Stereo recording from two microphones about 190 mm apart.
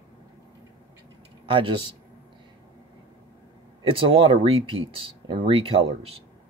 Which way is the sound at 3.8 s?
30° right (ahead or behind).